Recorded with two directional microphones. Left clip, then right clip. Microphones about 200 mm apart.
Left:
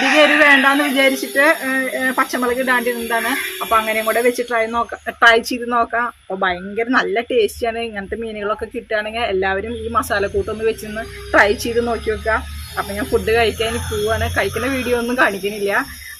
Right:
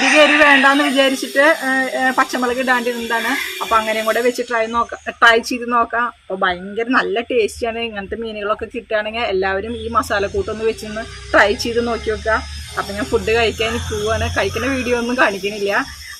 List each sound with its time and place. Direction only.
0.2 s speech: centre (ahead or behind)